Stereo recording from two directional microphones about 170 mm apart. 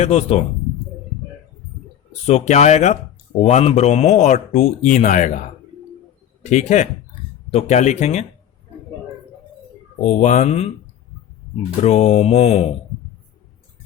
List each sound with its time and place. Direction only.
0.0 s mantra: 40° left (ahead or behind)
2.2 s mantra: 40° left (ahead or behind)
3.4 s speech: 40° left (ahead or behind)
6.4 s speech: 45° left (ahead or behind)
7.5 s mantra: 40° left (ahead or behind)
10.1 s speech: 45° left (ahead or behind)
11.8 s mantra: 40° left (ahead or behind)